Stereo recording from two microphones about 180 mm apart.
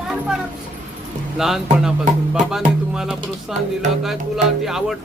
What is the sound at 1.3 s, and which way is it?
Speech, centre (ahead or behind).